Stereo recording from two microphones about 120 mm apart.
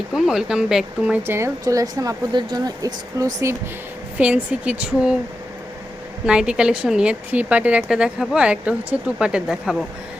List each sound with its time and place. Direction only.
0.1 s speech: 5° right (ahead or behind)
1.3 s a woman's voice: 25° right (ahead or behind)
4.2 s speech: 10° right (ahead or behind)
6.2 s speech: 5° right (ahead or behind)